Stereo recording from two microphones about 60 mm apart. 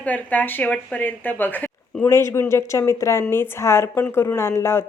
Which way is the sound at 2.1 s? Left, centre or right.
Left.